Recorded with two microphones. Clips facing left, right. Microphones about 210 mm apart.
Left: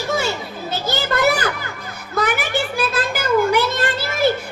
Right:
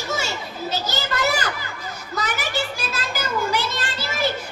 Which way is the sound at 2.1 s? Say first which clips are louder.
Left 6 dB; 55° left (ahead or behind).